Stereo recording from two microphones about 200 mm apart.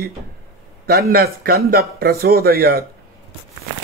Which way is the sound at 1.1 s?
50° right (ahead or behind).